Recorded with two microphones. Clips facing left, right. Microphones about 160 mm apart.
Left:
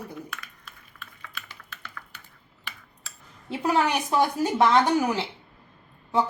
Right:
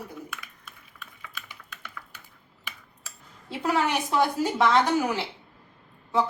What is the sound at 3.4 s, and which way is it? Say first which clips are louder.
Speech: left 2 dB; 20° left (ahead or behind).